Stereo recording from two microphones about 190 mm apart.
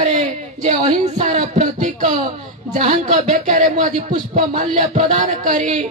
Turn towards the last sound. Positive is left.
turn(degrees=-40)  # may be behind; listen again after turning